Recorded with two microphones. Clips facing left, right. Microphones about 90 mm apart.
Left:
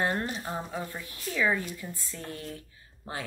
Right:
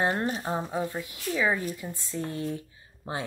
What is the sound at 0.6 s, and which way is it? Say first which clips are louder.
Speech: right 5 dB; 20° right (ahead or behind).